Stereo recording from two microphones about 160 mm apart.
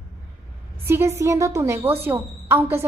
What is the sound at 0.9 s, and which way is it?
A woman's voice, 15° right (ahead or behind).